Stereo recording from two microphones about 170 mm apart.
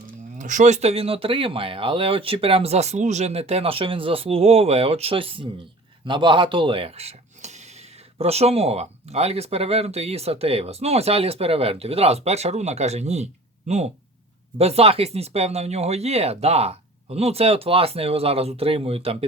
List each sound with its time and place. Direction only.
0.3 s speech: 45° right (ahead or behind)